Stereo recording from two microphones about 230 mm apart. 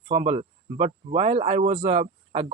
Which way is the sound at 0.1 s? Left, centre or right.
Right.